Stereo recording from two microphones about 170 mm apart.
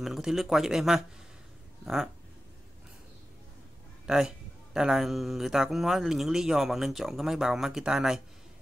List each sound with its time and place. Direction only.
0.0 s speech: centre (ahead or behind)
4.0 s a sound: 5° right (ahead or behind)
4.7 s speech: centre (ahead or behind)